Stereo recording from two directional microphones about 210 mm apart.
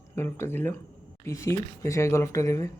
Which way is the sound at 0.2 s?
10° left (ahead or behind).